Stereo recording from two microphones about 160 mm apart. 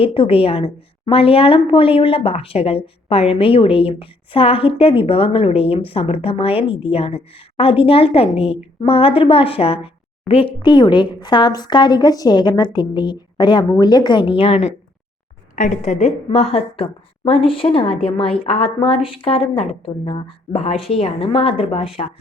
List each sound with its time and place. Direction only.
0.0 s a woman's voice: 35° left (ahead or behind)